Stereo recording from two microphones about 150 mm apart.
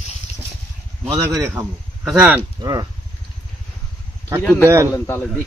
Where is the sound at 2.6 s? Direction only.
25° right (ahead or behind).